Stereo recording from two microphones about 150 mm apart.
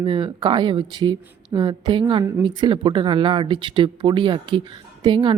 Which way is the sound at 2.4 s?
30° right (ahead or behind).